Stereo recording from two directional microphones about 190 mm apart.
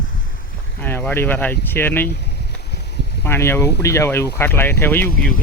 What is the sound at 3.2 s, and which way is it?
Speech, 10° left (ahead or behind).